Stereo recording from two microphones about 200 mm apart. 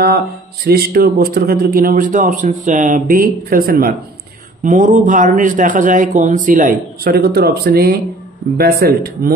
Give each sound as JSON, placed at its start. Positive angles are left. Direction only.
{"t": 0.7, "sound": "a man's voice", "side_deg": -50}